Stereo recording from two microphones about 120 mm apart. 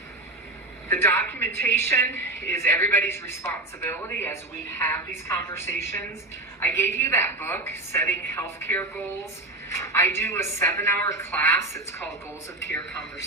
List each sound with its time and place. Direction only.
0.9 s a woman's voice: 20° left (ahead or behind)